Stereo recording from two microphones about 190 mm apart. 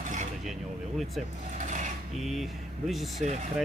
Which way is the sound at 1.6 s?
40° right (ahead or behind).